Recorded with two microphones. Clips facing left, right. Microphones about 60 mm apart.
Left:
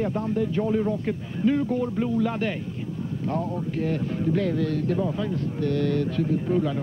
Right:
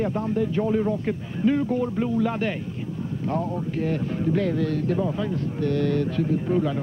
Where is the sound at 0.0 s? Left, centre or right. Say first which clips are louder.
Right 1 dB; right.